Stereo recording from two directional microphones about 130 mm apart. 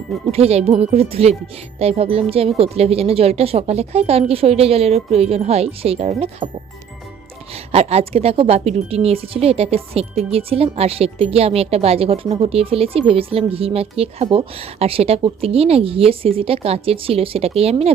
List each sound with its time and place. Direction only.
0.3 s speech: 50° right (ahead or behind)